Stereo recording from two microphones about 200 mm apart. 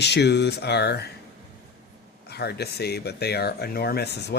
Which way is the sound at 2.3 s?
55° left (ahead or behind).